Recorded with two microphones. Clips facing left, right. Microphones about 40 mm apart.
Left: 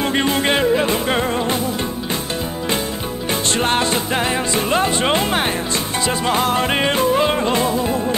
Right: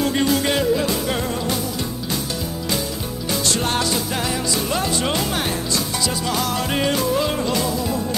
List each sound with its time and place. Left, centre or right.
0.0 s music: left
3.4 s music: left